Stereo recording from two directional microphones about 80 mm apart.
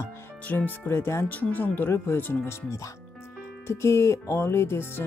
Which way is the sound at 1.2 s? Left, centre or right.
Centre.